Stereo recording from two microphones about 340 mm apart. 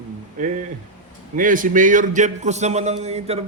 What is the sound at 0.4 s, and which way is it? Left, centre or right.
A man's voice, right.